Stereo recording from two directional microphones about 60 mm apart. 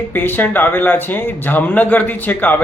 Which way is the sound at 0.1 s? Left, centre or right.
Left.